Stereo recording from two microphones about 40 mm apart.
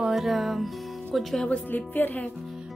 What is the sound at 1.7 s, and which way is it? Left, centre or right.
Speech, left.